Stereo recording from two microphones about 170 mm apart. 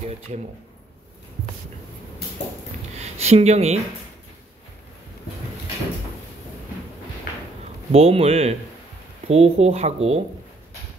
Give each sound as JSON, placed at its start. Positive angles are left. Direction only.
{"t": 3.0, "sound": "speech", "side_deg": -40}
{"t": 7.9, "sound": "speech", "side_deg": -35}